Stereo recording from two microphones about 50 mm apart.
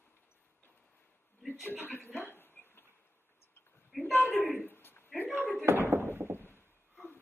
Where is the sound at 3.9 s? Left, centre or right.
Centre.